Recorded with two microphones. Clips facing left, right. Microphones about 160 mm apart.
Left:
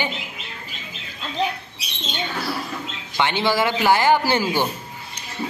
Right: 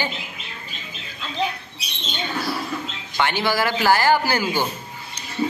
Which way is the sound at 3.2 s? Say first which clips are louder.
Left 1 dB; 25° left (ahead or behind).